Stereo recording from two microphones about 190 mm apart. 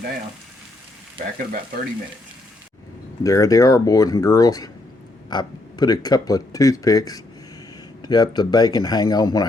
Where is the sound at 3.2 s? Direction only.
15° left (ahead or behind).